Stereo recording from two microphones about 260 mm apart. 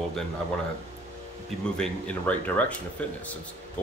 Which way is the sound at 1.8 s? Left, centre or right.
Centre.